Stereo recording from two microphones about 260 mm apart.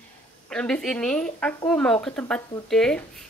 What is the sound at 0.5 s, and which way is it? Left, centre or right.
Speech, centre.